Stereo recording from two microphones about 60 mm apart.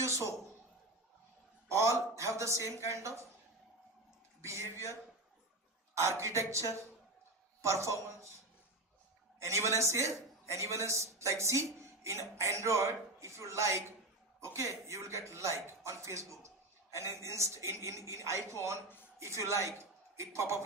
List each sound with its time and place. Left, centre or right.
1.7 s a woman's voice: right
4.4 s a woman's voice: right
7.6 s a woman's voice: right
9.4 s a man's voice: right
14.9 s a woman's voice: right